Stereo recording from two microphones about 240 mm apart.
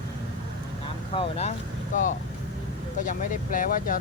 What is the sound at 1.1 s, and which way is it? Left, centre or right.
Speech, left.